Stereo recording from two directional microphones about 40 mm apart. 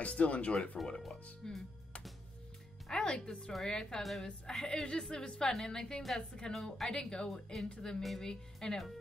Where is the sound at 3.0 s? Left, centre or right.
Left.